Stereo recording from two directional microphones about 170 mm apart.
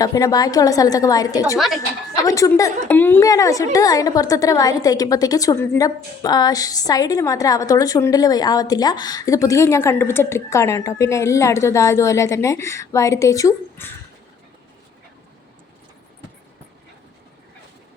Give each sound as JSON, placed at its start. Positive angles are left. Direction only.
{"t": 0.0, "sound": "a woman's voice", "side_deg": 20}
{"t": 1.5, "sound": "a woman's voice", "side_deg": 0}
{"t": 2.2, "sound": "a woman's voice", "side_deg": 20}